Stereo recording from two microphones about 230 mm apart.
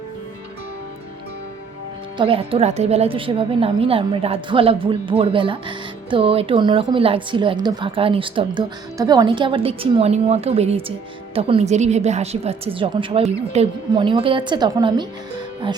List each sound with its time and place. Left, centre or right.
2.1 s a woman's voice: right